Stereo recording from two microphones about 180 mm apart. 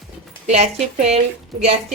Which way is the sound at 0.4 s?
35° right (ahead or behind).